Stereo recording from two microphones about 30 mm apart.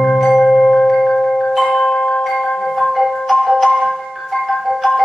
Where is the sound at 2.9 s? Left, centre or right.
Centre.